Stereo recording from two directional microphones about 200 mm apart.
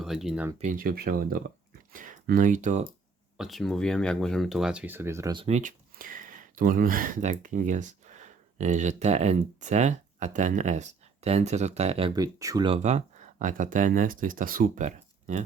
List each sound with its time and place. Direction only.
0.0 s speech: centre (ahead or behind)
0.8 s speech: 50° right (ahead or behind)
3.3 s speech: centre (ahead or behind); by 15.4 s 40° right (ahead or behind)